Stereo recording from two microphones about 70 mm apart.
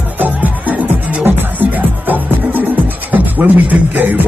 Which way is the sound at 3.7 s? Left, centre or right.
Right.